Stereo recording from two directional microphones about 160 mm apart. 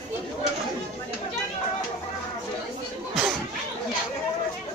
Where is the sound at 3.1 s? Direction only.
5° right (ahead or behind).